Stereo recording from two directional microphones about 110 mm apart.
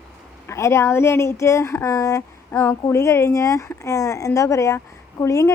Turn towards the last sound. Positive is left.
turn(degrees=25)  # may be behind; listen again after turning